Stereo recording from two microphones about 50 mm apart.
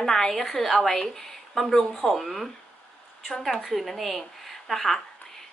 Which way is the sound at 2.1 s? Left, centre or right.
Centre.